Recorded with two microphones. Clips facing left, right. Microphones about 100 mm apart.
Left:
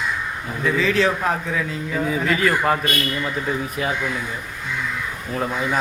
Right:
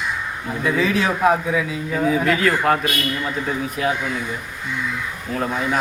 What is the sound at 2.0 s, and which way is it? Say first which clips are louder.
Speech: right 3 dB; centre (ahead or behind).